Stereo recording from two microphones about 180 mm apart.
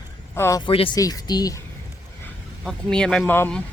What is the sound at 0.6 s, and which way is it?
Speech, 30° left (ahead or behind).